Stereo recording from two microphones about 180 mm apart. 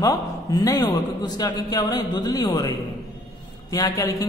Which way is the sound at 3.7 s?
20° left (ahead or behind).